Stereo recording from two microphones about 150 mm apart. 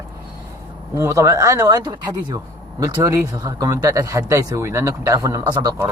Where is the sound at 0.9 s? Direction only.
20° right (ahead or behind).